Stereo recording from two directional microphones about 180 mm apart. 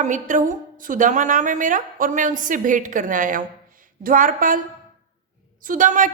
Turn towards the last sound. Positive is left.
turn(degrees=-45)  # may be behind; listen again after turning